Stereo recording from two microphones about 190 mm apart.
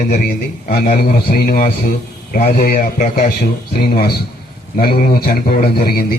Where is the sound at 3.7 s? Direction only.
55° left (ahead or behind).